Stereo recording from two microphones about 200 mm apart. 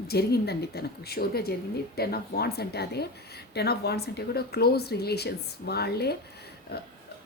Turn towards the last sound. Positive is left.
turn(degrees=55)  # may be behind; listen again after turning